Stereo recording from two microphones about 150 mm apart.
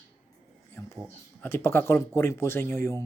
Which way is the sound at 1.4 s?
15° left (ahead or behind).